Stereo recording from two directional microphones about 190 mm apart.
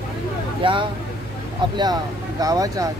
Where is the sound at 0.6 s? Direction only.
25° right (ahead or behind).